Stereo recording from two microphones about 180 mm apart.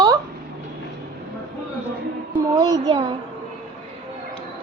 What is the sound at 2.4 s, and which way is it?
Speech, 20° right (ahead or behind).